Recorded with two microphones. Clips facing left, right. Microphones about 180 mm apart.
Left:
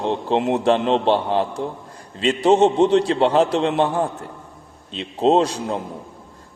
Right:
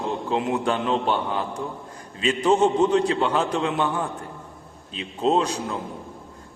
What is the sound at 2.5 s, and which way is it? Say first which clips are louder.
Speech: left 4 dB; 70° left (ahead or behind).